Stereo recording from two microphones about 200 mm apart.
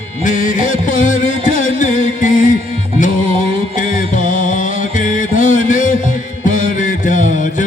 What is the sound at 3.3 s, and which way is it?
Music, 30° right (ahead or behind).